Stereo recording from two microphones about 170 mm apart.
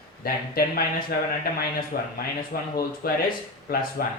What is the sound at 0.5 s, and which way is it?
A man's voice, 60° left (ahead or behind).